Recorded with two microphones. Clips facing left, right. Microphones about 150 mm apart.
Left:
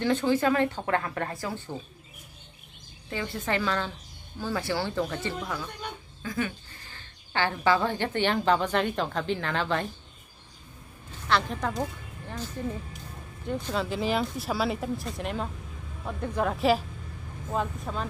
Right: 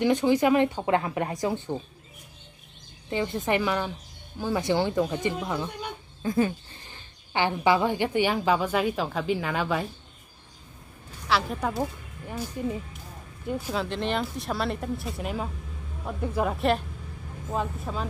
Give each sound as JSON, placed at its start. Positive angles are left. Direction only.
{"t": 0.0, "sound": "a woman's voice", "side_deg": -15}
{"t": 3.1, "sound": "a woman's voice", "side_deg": -20}
{"t": 6.2, "sound": "speech", "side_deg": -30}
{"t": 6.8, "sound": "a woman's voice", "side_deg": -15}
{"t": 11.2, "sound": "a woman's voice", "side_deg": -5}
{"t": 13.8, "sound": "speech", "side_deg": 5}